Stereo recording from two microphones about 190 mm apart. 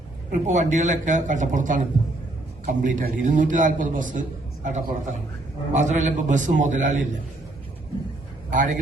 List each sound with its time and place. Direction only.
0.3 s a man's voice: 40° right (ahead or behind)
8.4 s a man's voice: 45° right (ahead or behind)